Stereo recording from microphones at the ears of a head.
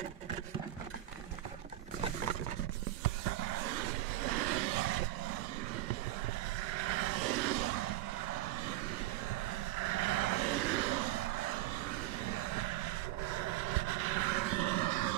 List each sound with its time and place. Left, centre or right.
3.0 s vehicle: right
6.7 s vehicle: right
9.8 s vehicle: right
13.3 s vehicle: right